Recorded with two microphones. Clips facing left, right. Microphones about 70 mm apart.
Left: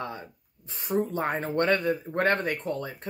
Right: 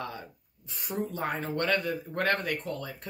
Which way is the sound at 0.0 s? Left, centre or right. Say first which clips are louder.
Left 2 dB; left.